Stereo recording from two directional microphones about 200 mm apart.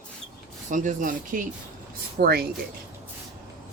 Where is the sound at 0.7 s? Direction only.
40° right (ahead or behind).